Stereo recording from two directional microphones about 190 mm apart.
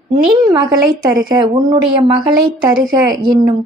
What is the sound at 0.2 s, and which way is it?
Speech, 20° right (ahead or behind).